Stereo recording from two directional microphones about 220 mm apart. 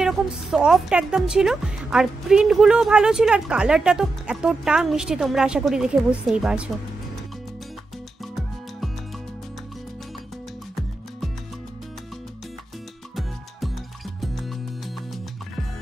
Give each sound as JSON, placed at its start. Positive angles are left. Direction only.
{"t": 0.0, "sound": "a woman's voice", "side_deg": -5}
{"t": 14.2, "sound": "music", "side_deg": 0}